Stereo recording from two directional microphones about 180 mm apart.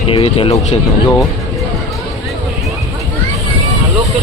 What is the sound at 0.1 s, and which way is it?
Speech, 30° left (ahead or behind).